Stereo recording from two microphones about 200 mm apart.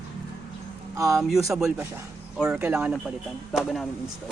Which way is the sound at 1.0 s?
15° right (ahead or behind).